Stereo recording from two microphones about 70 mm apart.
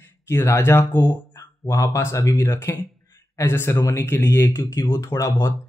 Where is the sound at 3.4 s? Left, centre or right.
Left.